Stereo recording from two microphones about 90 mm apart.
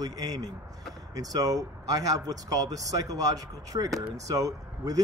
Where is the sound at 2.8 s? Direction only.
45° right (ahead or behind).